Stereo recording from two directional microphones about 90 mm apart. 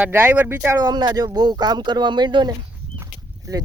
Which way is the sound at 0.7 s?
50° right (ahead or behind).